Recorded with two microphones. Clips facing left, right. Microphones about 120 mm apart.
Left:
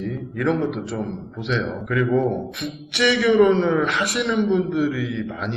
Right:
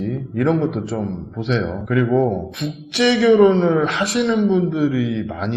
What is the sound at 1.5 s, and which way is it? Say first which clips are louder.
Speech: right 3 dB; 35° right (ahead or behind).